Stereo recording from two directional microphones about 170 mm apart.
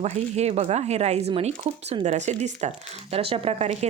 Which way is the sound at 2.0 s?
45° right (ahead or behind).